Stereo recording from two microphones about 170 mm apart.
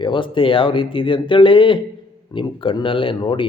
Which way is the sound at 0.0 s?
30° left (ahead or behind).